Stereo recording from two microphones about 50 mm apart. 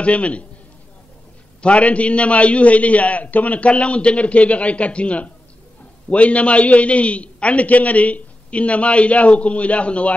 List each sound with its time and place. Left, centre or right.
0.0 s a man's voice: left
1.6 s a man's voice: left